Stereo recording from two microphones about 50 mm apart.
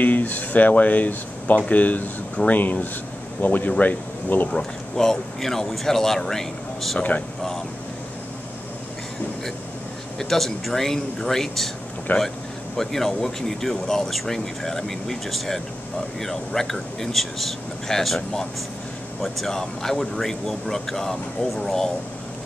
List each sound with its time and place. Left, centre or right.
0.0 s speech: left
4.5 s speech: centre
7.0 s speech: left
10.1 s speech: centre
12.1 s speech: left
12.7 s speech: centre